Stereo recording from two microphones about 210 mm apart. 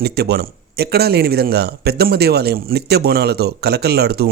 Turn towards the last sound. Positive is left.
turn(degrees=-50)  # may be behind; listen again after turning